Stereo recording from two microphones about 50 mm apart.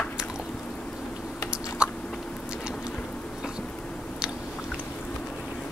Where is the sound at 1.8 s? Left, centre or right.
Right.